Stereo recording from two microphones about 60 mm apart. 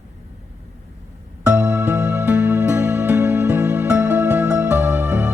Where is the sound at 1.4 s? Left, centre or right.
Centre.